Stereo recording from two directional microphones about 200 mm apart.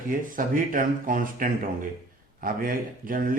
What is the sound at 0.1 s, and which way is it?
A man's voice, 45° right (ahead or behind).